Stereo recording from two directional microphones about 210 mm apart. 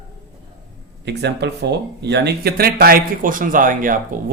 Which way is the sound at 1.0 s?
55° right (ahead or behind).